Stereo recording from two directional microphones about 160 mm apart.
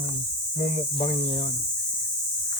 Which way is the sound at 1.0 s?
35° left (ahead or behind).